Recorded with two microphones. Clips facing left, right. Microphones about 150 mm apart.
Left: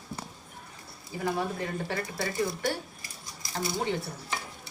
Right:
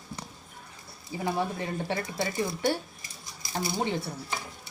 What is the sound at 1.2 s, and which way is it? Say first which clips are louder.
Speech: even; 20° right (ahead or behind).